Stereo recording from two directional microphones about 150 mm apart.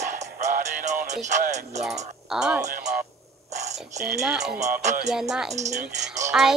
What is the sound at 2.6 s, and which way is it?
Speech, 55° right (ahead or behind).